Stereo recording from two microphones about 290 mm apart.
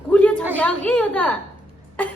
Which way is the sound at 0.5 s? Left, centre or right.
Centre.